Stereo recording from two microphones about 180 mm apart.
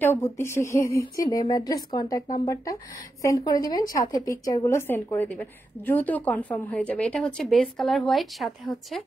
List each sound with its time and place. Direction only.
0.0 s a woman's voice: 15° left (ahead or behind)